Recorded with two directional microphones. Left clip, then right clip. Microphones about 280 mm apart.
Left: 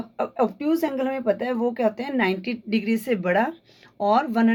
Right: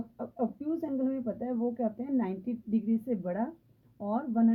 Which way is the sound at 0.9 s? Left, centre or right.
Centre.